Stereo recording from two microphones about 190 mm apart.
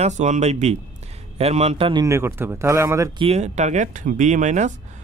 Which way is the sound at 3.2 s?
35° right (ahead or behind).